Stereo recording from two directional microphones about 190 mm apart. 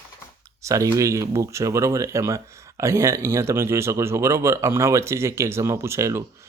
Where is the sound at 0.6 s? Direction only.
15° right (ahead or behind).